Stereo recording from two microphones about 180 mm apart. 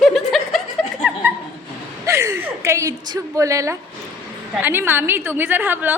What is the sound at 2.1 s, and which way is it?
A woman's voice, 15° right (ahead or behind).